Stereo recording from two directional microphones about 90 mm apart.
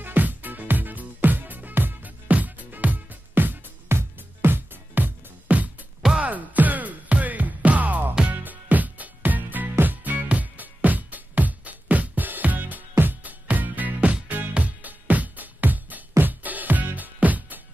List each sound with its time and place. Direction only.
0.0 s music: 20° right (ahead or behind)